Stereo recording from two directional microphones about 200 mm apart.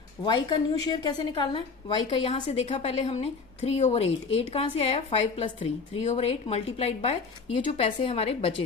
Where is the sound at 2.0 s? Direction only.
35° left (ahead or behind).